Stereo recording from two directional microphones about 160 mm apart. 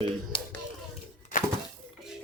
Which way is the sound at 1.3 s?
55° left (ahead or behind).